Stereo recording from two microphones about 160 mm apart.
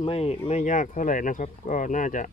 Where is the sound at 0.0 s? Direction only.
40° left (ahead or behind).